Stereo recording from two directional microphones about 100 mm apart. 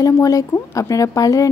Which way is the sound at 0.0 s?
35° left (ahead or behind).